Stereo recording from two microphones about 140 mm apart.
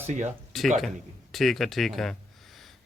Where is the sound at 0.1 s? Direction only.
60° right (ahead or behind).